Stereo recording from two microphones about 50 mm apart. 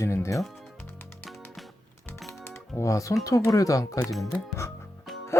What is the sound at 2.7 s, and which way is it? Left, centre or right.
Speech, left.